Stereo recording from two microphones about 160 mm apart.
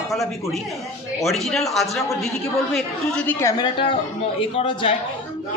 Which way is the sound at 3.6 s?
30° left (ahead or behind).